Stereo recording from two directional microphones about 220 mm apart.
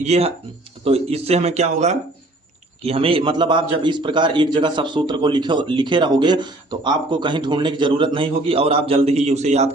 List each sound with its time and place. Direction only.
0.0 s a man's voice: 30° right (ahead or behind)